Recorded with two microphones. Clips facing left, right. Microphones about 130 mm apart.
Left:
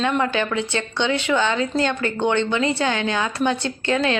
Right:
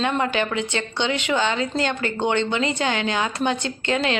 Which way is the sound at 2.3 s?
30° right (ahead or behind).